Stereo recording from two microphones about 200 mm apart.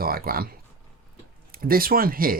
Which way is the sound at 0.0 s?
50° right (ahead or behind).